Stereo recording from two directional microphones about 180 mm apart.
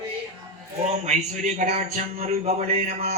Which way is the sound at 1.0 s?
40° right (ahead or behind).